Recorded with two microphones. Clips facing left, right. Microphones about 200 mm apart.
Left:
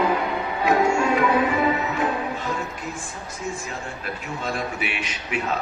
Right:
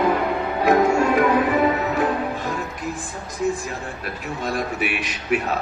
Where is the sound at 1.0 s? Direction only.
45° right (ahead or behind).